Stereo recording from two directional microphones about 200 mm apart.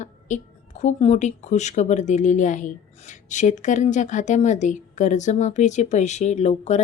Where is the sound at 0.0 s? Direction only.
35° left (ahead or behind).